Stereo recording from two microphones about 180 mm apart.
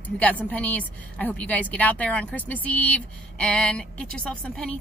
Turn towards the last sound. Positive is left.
turn(degrees=5)  # may be behind; listen again after turning